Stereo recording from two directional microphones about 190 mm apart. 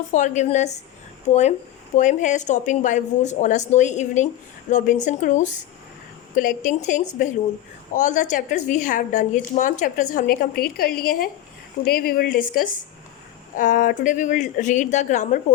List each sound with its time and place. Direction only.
0.1 s a woman's voice: 40° left (ahead or behind)